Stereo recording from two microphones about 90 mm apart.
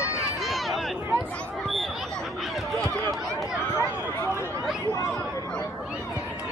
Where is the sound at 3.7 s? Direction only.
30° left (ahead or behind).